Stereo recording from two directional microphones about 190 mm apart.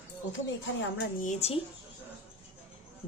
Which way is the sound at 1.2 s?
35° left (ahead or behind).